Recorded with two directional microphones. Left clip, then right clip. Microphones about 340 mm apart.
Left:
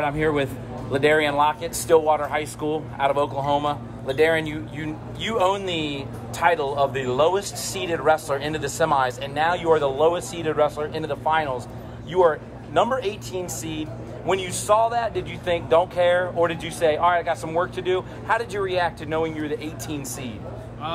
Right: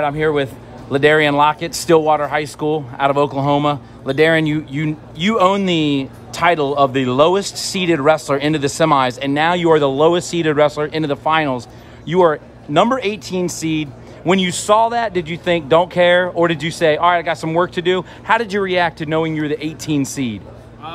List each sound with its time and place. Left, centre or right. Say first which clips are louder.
0.0 s a man's voice: right 5 dB; right
12.7 s a man's voice: right 6 dB; right